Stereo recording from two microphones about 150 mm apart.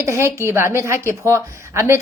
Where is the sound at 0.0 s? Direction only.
20° right (ahead or behind).